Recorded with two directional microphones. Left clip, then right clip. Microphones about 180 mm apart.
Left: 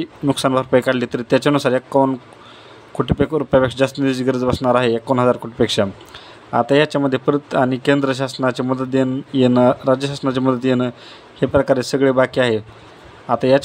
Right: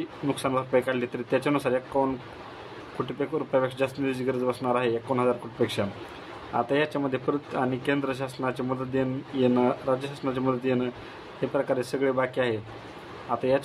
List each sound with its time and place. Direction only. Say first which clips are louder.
0.0 s speech: left 10 dB; 40° left (ahead or behind)
3.1 s speech: left 11 dB; 40° left (ahead or behind)